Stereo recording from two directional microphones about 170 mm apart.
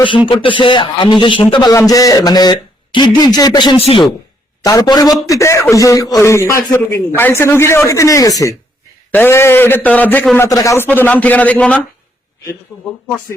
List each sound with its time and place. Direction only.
0.3 s a man's voice: 30° left (ahead or behind)
4.6 s a man's voice: 20° left (ahead or behind)